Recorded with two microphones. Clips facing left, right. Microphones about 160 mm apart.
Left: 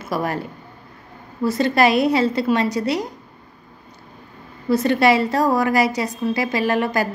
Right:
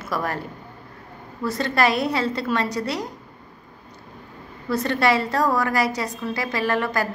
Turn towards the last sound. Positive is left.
turn(degrees=15)  # may be behind; listen again after turning